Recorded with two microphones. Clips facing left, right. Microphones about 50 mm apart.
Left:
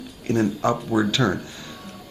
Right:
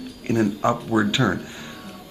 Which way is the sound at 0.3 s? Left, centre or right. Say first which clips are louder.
Right 1 dB; centre.